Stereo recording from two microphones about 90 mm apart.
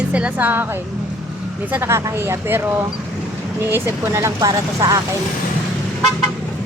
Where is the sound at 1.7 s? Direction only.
30° right (ahead or behind).